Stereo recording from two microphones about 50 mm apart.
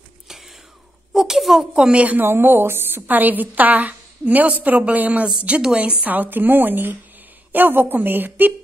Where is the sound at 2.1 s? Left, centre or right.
Right.